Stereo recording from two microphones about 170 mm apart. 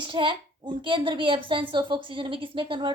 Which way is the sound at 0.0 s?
30° right (ahead or behind).